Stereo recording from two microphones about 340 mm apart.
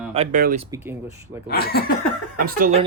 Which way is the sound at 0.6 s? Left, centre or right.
Centre.